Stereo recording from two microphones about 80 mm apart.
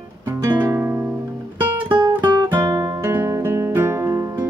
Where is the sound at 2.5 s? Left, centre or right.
Right.